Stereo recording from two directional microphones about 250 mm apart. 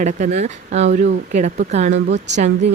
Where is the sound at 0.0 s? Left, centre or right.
Right.